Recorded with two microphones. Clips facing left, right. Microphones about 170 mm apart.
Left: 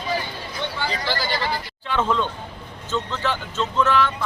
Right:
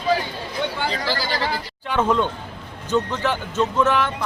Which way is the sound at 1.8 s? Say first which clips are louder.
Right 3 dB; 15° right (ahead or behind).